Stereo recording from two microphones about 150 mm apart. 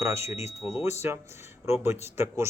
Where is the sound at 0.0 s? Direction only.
20° right (ahead or behind).